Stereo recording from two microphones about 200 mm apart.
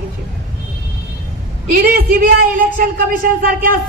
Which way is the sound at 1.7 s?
45° right (ahead or behind).